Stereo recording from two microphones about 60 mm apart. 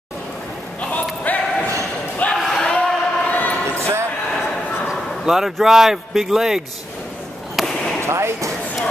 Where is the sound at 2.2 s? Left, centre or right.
Left.